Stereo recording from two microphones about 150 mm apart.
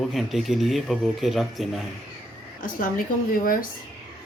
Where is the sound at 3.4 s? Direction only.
70° left (ahead or behind).